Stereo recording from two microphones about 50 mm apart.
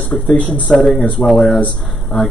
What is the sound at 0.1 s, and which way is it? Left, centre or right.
Speech, centre.